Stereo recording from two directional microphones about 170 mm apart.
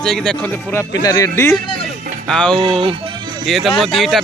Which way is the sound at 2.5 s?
30° right (ahead or behind).